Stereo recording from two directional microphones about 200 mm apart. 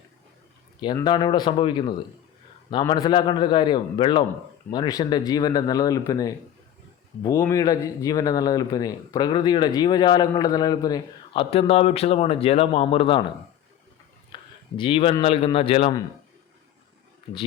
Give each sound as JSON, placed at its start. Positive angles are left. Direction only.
{"t": 0.9, "sound": "speech", "side_deg": 20}
{"t": 11.5, "sound": "speech", "side_deg": 30}
{"t": 14.3, "sound": "a sound", "side_deg": 25}
{"t": 14.8, "sound": "speech", "side_deg": 25}